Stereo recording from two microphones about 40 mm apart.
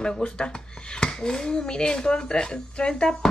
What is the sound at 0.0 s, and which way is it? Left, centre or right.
Speech, left.